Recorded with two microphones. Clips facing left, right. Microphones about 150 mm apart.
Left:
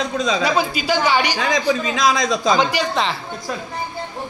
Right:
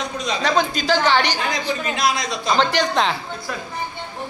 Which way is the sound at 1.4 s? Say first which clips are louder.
Left 5 dB; 90° left.